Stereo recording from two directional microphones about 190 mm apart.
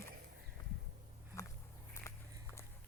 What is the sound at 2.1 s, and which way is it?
Walk, 15° left (ahead or behind).